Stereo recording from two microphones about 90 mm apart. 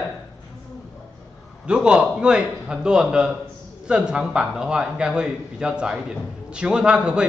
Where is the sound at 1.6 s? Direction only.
10° right (ahead or behind).